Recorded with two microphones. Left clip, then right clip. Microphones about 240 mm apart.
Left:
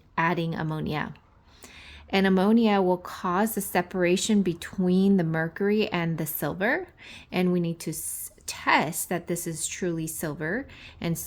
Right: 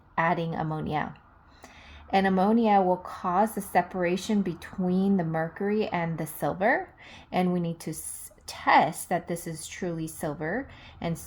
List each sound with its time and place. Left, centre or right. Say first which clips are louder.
0.2 s a woman's voice: even; left
2.1 s a woman's voice: even; left
8.7 s a woman's voice: right 3 dB; left